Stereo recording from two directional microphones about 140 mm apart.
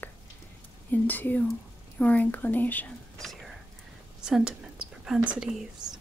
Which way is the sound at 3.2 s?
Centre (ahead or behind).